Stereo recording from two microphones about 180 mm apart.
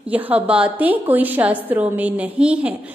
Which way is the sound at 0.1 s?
5° right (ahead or behind).